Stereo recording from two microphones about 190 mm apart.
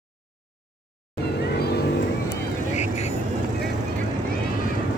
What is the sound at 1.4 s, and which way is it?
Vehicle, 60° left (ahead or behind).